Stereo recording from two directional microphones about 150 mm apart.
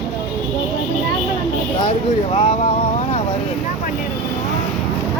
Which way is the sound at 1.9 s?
45° left (ahead or behind).